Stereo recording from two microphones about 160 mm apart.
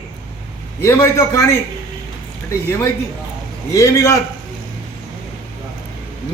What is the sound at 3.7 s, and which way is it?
Speech, 20° left (ahead or behind).